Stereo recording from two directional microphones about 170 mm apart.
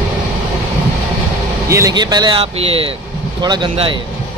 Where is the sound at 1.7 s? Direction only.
20° right (ahead or behind).